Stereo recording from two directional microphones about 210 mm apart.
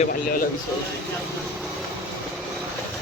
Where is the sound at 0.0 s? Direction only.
40° left (ahead or behind).